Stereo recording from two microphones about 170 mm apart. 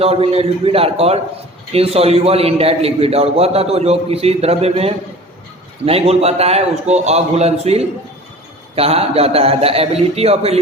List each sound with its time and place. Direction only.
0.0 s a man's voice: 35° right (ahead or behind)